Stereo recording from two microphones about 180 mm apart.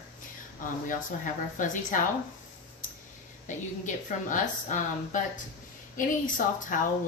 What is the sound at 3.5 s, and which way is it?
Speech, 45° left (ahead or behind).